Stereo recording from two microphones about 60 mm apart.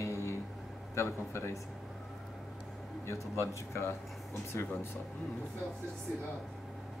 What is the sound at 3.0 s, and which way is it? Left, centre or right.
Speech, left.